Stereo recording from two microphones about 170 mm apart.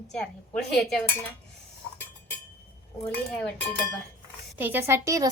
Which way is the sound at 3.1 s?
10° left (ahead or behind).